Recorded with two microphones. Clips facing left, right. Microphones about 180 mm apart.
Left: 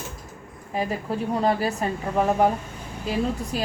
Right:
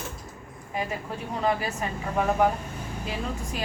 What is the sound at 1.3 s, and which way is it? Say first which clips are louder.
Speech: left 3 dB; 35° left (ahead or behind).